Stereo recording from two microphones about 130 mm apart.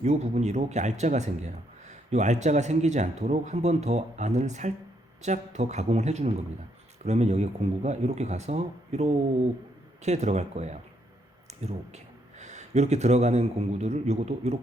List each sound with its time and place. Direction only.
0.0 s speech: 60° right (ahead or behind)
11.4 s a sound: 60° right (ahead or behind)
12.4 s speech: 60° right (ahead or behind)